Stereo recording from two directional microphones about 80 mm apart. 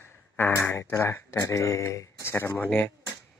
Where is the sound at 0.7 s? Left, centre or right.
Left.